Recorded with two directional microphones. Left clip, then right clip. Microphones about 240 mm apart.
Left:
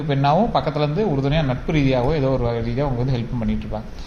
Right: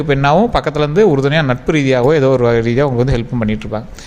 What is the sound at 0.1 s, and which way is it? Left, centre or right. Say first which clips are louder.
A man's voice: right 6 dB; right.